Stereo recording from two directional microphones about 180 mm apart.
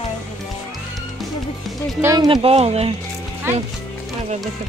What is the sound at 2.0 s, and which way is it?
Speech, 20° right (ahead or behind).